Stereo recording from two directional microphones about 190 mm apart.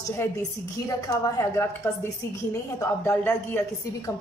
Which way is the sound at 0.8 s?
15° left (ahead or behind).